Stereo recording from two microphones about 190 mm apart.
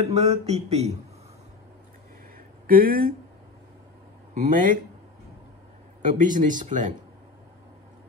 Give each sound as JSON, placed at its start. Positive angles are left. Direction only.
{"t": 0.0, "sound": "speech", "side_deg": -35}
{"t": 2.3, "sound": "a sound", "side_deg": -50}
{"t": 4.3, "sound": "speech", "side_deg": -40}
{"t": 6.0, "sound": "speech", "side_deg": -45}